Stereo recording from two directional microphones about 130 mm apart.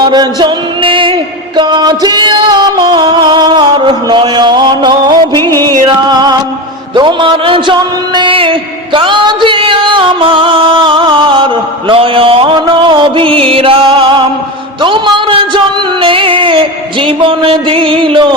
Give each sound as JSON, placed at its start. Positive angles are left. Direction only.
{"t": 0.0, "sound": "music", "side_deg": -35}
{"t": 5.4, "sound": "music", "side_deg": 20}
{"t": 5.6, "sound": "music", "side_deg": -30}
{"t": 6.9, "sound": "a sound", "side_deg": -40}
{"t": 11.9, "sound": "music", "side_deg": -45}
{"t": 14.8, "sound": "a sound", "side_deg": -40}
{"t": 17.1, "sound": "music", "side_deg": -45}